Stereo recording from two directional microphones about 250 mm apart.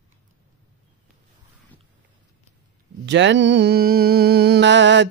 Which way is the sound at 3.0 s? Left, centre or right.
Right.